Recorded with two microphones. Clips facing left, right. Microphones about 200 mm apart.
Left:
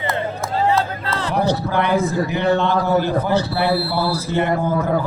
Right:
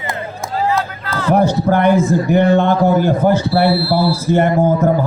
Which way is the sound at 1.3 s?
50° right (ahead or behind).